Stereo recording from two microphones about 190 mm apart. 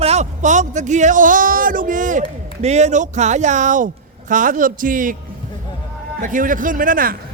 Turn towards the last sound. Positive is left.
turn(degrees=-45)  # may be behind; listen again after turning